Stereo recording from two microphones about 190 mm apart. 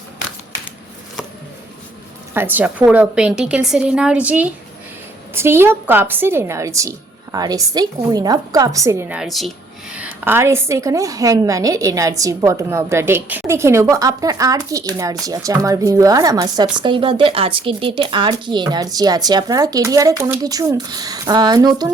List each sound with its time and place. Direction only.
2.3 s a woman's voice: 10° right (ahead or behind)